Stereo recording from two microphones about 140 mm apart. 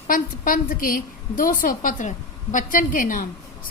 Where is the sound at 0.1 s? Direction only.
85° left.